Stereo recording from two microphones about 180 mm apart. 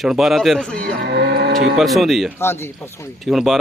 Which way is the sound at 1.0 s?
65° right (ahead or behind).